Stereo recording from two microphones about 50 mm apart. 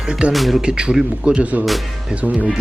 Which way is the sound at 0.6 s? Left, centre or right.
Centre.